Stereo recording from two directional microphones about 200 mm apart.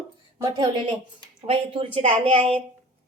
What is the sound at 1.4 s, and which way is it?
Speech, 30° right (ahead or behind).